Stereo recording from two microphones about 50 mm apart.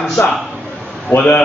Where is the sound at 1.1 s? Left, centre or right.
Left.